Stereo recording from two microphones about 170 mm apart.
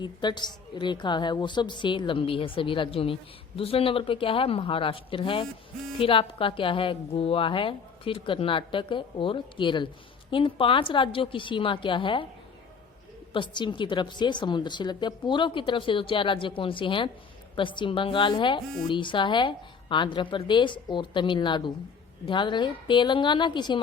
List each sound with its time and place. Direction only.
0.0 s a woman's voice: 25° left (ahead or behind)
13.3 s a woman's voice: 25° left (ahead or behind)